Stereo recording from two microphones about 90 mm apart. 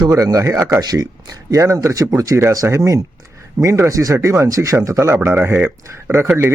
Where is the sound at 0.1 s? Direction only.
40° right (ahead or behind).